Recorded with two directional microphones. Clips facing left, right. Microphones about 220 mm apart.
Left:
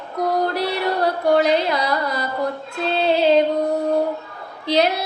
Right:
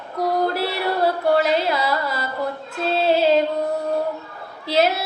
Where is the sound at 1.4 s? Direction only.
5° right (ahead or behind).